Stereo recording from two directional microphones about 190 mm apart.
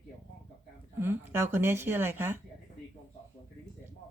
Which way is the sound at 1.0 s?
15° right (ahead or behind).